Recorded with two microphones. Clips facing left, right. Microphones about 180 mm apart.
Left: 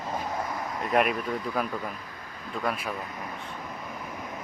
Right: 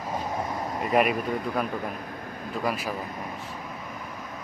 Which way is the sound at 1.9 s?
55° right (ahead or behind).